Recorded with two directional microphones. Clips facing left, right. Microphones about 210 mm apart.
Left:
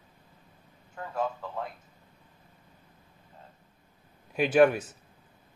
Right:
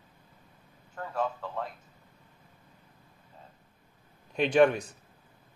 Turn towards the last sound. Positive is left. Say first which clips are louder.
# left 1 dB
turn(degrees=5)  # may be behind; listen again after turning